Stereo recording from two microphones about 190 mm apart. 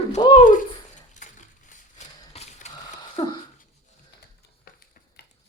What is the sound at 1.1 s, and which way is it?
Mechanisms, 40° left (ahead or behind).